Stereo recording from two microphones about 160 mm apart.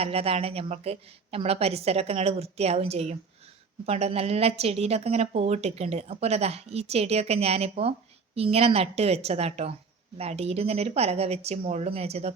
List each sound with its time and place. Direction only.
0.0 s a woman's voice: 40° right (ahead or behind)